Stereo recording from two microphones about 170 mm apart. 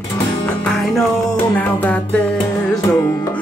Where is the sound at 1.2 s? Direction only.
5° left (ahead or behind).